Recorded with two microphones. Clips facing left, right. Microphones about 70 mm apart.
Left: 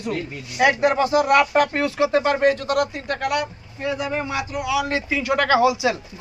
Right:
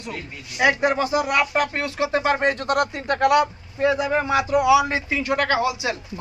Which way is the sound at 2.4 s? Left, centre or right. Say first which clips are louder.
Left 2 dB; right.